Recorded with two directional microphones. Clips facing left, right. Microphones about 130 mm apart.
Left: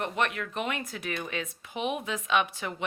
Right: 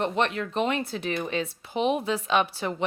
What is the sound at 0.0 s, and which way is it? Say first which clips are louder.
Speech: right 4 dB; 30° right (ahead or behind).